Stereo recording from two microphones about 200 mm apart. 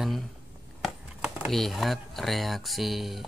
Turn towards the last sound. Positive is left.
turn(degrees=0)  # may be behind; listen again after turning